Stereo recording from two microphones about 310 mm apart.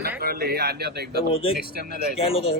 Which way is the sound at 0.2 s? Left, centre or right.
Right.